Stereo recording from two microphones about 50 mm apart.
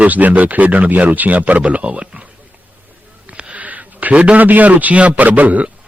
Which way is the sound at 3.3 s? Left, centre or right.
Right.